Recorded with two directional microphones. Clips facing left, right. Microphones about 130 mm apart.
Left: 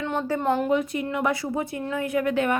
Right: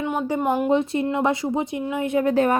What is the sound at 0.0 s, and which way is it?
Speech, 10° right (ahead or behind).